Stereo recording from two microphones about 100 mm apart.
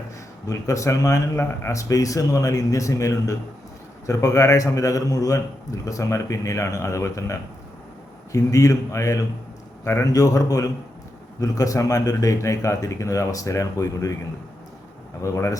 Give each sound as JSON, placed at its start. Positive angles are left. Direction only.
{"t": 0.4, "sound": "a man's voice", "side_deg": 30}
{"t": 15.2, "sound": "a man's voice", "side_deg": 30}